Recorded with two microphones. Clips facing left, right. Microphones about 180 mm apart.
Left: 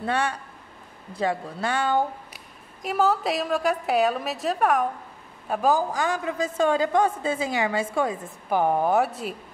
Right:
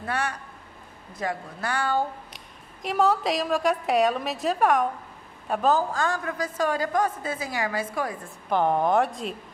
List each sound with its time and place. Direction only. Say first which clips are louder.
0.0 s a woman's voice: left 3 dB; 25° left (ahead or behind)
2.3 s a woman's voice: even; 5° left (ahead or behind); by 8.3 s 25° left (ahead or behind)
8.5 s speech: left 1 dB; 10° left (ahead or behind)